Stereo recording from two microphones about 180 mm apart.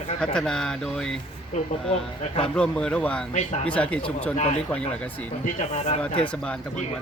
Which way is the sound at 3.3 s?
35° left (ahead or behind).